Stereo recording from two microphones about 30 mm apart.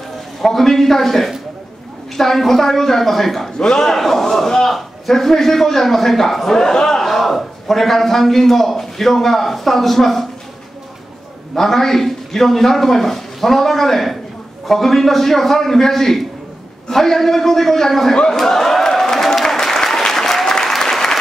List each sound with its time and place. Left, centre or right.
0.4 s a man's voice: centre
3.5 s a man's voice: centre
7.0 s a man's voice: centre
11.5 s a man's voice: centre
18.1 s speech: left
18.4 s applause: centre